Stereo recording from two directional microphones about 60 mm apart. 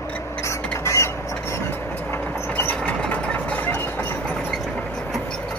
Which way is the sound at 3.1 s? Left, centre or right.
Left.